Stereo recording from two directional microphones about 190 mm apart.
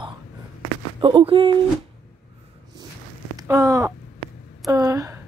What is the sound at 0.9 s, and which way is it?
Speech, 25° right (ahead or behind).